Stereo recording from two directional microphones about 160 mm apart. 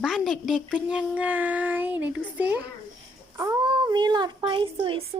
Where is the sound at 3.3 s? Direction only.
20° right (ahead or behind).